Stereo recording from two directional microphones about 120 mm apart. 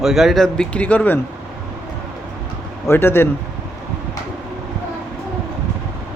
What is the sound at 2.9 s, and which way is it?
Speech, 20° left (ahead or behind).